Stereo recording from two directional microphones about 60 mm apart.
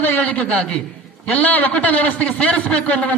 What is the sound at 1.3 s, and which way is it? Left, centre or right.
A man's voice, left.